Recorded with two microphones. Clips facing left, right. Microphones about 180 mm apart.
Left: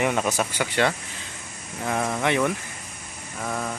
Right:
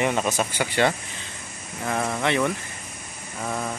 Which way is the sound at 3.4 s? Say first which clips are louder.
Even; 5° right (ahead or behind).